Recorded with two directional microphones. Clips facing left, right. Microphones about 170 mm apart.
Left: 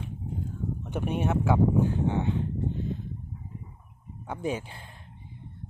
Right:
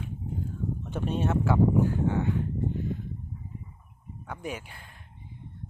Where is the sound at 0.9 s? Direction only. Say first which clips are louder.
Left 1 dB; 15° left (ahead or behind).